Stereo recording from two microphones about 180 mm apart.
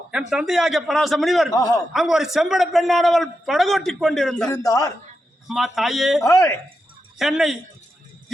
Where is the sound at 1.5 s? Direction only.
20° left (ahead or behind).